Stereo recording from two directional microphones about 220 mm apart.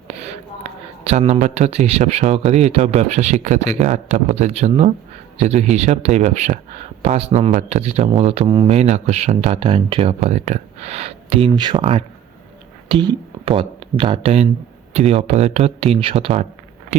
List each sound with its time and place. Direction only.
0.2 s speech: 30° right (ahead or behind)
8.7 s speech: 30° right (ahead or behind)